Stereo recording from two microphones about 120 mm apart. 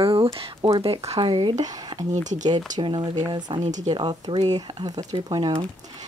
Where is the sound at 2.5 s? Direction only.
35° right (ahead or behind).